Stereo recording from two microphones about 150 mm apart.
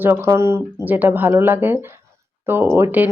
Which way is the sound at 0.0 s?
15° right (ahead or behind).